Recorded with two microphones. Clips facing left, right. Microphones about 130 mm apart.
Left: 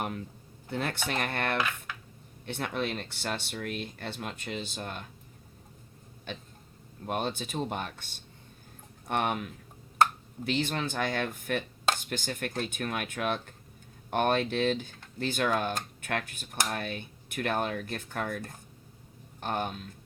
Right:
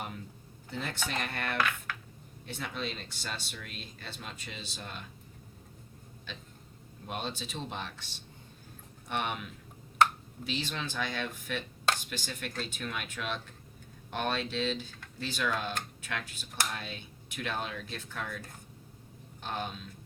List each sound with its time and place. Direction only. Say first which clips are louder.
0.7 s speech: left 4 dB; 55° left (ahead or behind)
7.1 s speech: left 6 dB; 55° left (ahead or behind)